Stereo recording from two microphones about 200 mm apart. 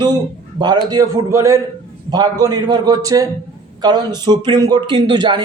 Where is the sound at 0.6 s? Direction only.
20° right (ahead or behind).